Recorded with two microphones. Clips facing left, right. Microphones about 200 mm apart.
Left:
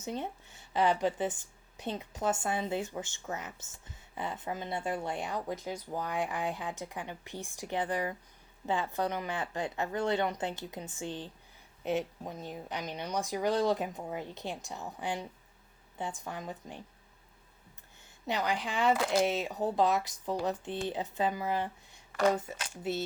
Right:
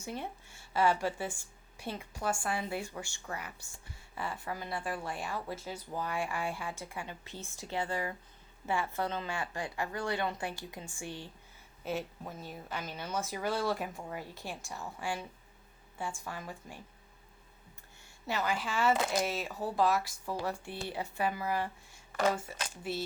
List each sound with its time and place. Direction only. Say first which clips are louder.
0.0 s a woman's voice: left 3 dB; 20° left (ahead or behind)
18.3 s a woman's voice: left 1 dB; 15° left (ahead or behind)